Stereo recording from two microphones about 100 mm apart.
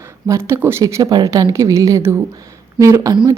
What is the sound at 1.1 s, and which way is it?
A woman's voice, 40° right (ahead or behind).